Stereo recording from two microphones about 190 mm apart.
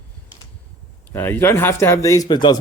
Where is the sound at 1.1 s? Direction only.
10° left (ahead or behind).